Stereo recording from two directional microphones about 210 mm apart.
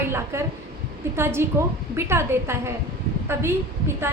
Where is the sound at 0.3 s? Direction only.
10° right (ahead or behind).